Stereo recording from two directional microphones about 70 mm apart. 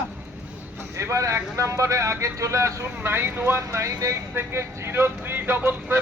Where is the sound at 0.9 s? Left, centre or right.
Right.